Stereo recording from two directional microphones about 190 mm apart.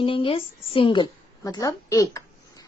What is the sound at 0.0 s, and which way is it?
A woman's voice, 30° left (ahead or behind).